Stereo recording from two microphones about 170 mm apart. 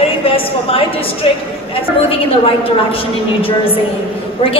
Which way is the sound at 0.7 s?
35° left (ahead or behind).